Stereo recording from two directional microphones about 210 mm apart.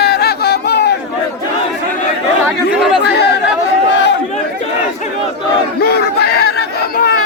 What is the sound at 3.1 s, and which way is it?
Chatter, 50° left (ahead or behind).